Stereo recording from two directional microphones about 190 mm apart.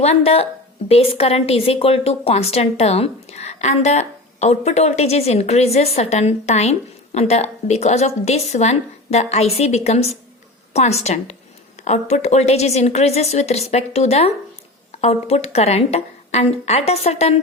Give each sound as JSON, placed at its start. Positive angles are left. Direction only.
{"t": 0.0, "sound": "a woman's voice", "side_deg": 35}